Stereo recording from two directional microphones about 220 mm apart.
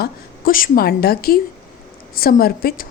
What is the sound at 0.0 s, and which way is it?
A woman's voice, 40° left (ahead or behind).